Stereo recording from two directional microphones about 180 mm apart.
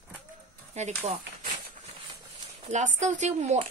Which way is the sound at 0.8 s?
40° right (ahead or behind).